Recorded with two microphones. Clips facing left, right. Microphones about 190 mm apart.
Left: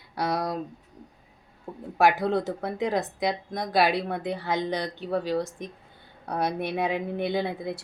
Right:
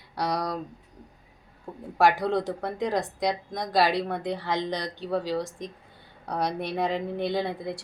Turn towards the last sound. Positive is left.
turn(degrees=0)  # may be behind; listen again after turning